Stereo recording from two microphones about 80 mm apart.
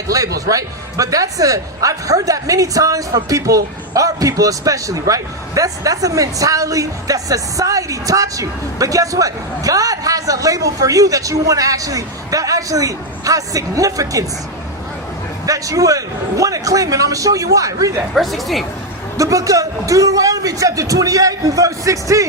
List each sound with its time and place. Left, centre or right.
0.1 s speech: right
15.4 s speech: right
18.1 s a woman's voice: centre
19.1 s speech: right